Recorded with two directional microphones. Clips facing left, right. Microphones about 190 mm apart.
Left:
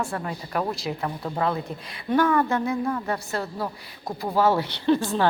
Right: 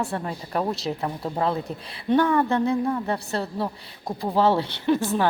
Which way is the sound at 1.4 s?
30° right (ahead or behind).